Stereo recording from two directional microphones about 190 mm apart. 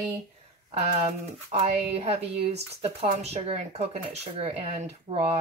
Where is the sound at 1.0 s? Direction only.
35° right (ahead or behind).